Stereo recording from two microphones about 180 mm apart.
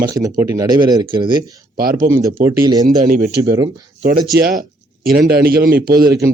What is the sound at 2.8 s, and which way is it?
Speech, 50° right (ahead or behind).